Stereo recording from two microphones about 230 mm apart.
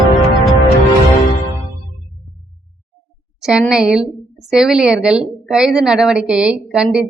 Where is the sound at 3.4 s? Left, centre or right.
Centre.